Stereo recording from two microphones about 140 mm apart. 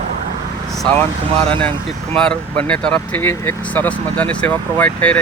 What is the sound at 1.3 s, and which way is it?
Speech, 45° right (ahead or behind).